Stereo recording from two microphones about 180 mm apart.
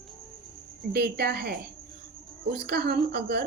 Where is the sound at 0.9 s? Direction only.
60° right (ahead or behind).